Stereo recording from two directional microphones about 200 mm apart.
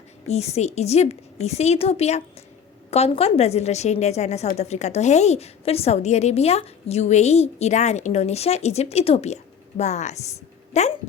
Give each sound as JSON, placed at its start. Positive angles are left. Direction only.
{"t": 0.3, "sound": "a woman's voice", "side_deg": 30}